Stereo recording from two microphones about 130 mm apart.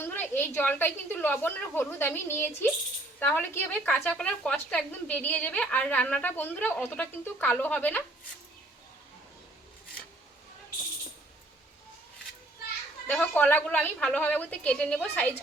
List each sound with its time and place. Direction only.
0.0 s a woman's voice: 15° left (ahead or behind)
13.1 s a woman's voice: 15° left (ahead or behind)